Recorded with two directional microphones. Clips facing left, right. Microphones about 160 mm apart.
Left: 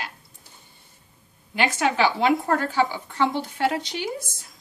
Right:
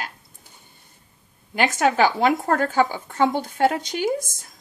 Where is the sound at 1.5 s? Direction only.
45° right (ahead or behind).